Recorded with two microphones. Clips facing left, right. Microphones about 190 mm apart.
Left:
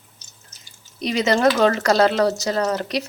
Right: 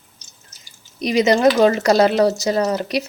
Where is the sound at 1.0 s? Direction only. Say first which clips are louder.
Right 3 dB; 15° right (ahead or behind).